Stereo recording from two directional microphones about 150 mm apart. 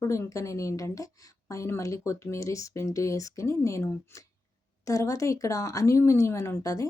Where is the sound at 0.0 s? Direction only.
20° left (ahead or behind).